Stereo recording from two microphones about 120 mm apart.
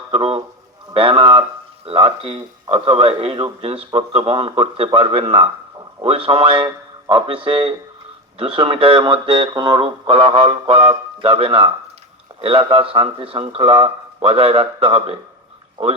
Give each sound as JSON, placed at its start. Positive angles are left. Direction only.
{"t": 0.1, "sound": "a man's voice", "side_deg": -50}